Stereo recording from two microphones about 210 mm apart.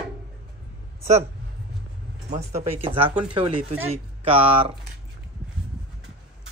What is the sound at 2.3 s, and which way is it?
Speech, 30° right (ahead or behind).